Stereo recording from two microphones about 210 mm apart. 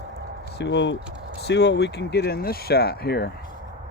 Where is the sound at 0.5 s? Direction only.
55° left (ahead or behind).